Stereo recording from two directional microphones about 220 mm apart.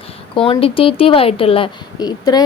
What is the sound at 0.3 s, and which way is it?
Speech, 25° left (ahead or behind).